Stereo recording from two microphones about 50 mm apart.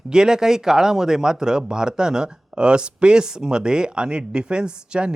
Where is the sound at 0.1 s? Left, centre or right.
Centre.